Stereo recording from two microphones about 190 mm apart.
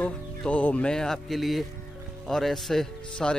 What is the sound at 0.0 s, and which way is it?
Speech, 5° left (ahead or behind).